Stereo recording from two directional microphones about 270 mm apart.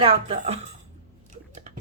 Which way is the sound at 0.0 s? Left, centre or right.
Right.